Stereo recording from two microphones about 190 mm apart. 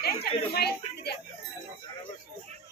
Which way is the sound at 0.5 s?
55° left (ahead or behind).